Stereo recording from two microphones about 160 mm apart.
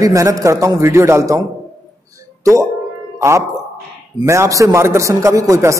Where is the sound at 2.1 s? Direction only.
20° right (ahead or behind).